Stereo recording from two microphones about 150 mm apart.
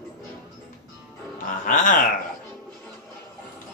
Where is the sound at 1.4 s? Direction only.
60° left (ahead or behind).